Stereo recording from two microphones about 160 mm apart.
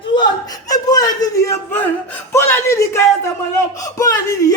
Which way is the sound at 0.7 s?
25° left (ahead or behind).